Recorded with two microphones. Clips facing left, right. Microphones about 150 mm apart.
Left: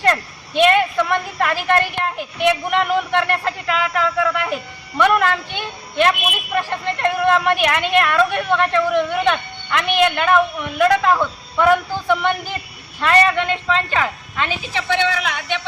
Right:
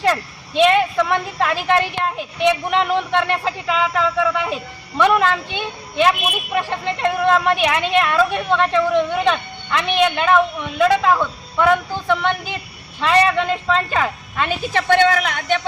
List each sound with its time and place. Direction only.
0.0 s speech: centre (ahead or behind)
13.0 s speech: centre (ahead or behind)
14.6 s speech: 50° right (ahead or behind)